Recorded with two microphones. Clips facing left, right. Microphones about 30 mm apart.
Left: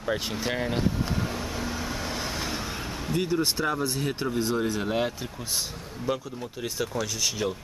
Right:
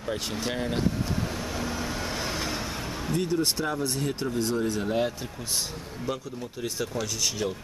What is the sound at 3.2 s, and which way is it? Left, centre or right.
Speech, centre.